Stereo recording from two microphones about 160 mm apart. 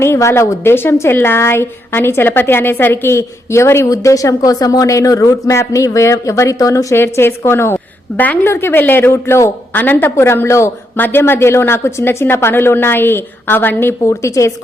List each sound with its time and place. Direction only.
0.0 s a woman's voice: 15° left (ahead or behind)